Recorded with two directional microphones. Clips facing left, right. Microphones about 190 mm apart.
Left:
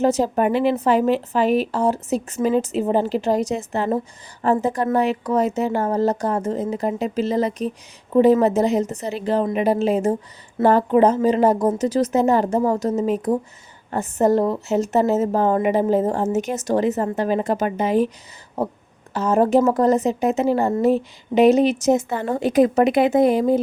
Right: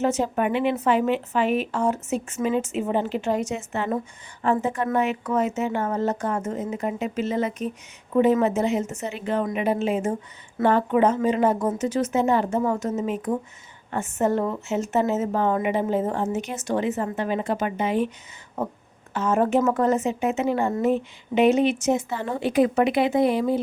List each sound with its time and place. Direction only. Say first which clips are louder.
0.0 s a woman's voice: left 5 dB; 35° left (ahead or behind)